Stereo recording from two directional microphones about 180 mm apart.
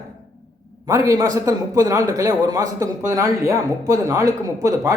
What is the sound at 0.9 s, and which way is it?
A man's voice, 20° right (ahead or behind).